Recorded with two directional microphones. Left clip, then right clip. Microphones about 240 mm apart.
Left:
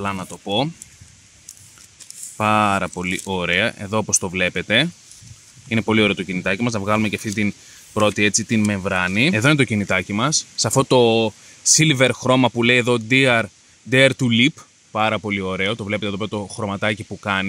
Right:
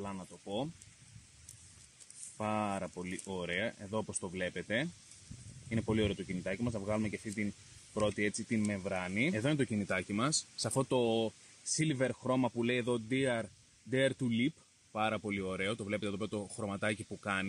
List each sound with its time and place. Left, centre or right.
0.0 s speech: left
2.3 s speech: left